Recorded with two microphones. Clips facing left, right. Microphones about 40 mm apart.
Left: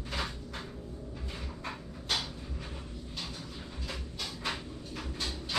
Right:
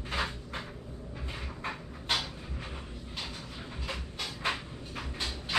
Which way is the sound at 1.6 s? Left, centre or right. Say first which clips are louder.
Right 3 dB; right.